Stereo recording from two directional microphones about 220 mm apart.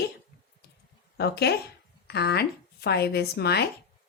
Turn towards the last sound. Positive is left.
turn(degrees=50)  # may be behind; listen again after turning